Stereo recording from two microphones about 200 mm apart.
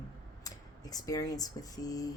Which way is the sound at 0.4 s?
15° left (ahead or behind).